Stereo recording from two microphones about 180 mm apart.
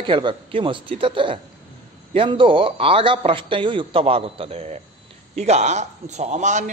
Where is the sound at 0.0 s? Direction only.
30° right (ahead or behind).